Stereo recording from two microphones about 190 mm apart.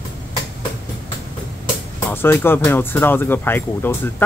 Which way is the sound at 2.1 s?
10° left (ahead or behind).